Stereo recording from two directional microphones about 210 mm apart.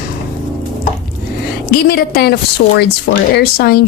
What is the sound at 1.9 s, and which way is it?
Speech, 45° left (ahead or behind).